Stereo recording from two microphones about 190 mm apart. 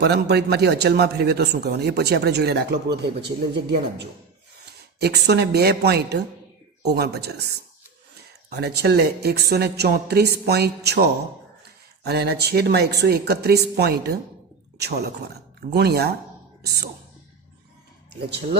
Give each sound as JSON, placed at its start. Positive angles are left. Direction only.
{"t": 0.0, "sound": "a man's voice", "side_deg": -60}
{"t": 4.9, "sound": "a man's voice", "side_deg": -60}